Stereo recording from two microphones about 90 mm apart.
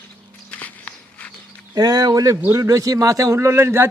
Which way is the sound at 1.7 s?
45° right (ahead or behind).